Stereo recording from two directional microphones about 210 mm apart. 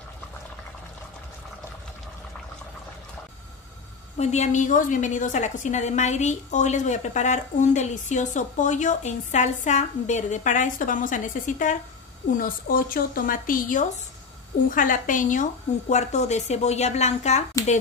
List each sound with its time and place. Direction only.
4.2 s a woman's voice: 35° left (ahead or behind)